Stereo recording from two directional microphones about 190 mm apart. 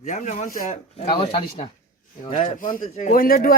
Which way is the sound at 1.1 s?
30° left (ahead or behind).